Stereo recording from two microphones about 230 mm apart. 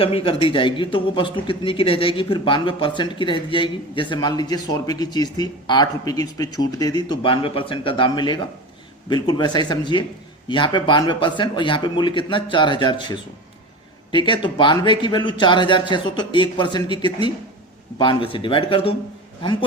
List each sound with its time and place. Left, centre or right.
0.0 s a man's voice: left